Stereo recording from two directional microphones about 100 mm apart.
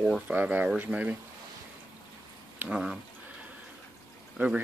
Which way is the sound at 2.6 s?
5° right (ahead or behind).